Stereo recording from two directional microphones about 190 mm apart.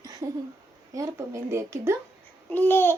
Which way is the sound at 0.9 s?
15° right (ahead or behind).